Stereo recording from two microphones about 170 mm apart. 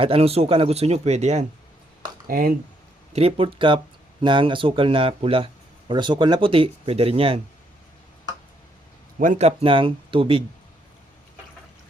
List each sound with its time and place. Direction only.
0.0 s speech: 35° right (ahead or behind)
2.2 s speech: 60° right (ahead or behind)
3.1 s speech: 35° right (ahead or behind)
9.1 s a man's voice: 50° right (ahead or behind)
9.5 s speech: 35° right (ahead or behind)